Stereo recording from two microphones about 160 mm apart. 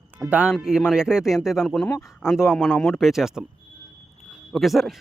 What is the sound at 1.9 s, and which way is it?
Speech, 15° left (ahead or behind).